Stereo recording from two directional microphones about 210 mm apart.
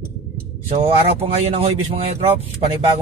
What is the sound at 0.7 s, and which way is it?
Speech, 30° right (ahead or behind).